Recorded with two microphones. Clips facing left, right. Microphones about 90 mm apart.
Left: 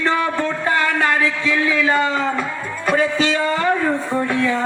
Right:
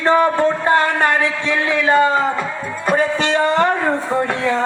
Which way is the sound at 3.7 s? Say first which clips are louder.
Right 1 dB; 40° right (ahead or behind).